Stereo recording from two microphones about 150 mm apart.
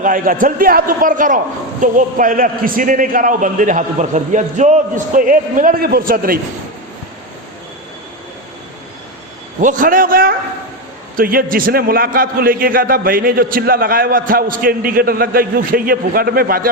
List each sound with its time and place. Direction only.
0.0 s a man's voice: 65° right (ahead or behind)
9.6 s a man's voice: 60° right (ahead or behind); by 16.6 s 80° right